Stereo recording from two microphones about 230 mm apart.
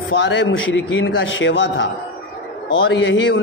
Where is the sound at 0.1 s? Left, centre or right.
Left.